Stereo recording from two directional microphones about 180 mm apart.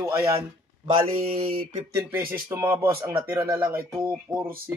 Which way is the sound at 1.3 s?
55° right (ahead or behind).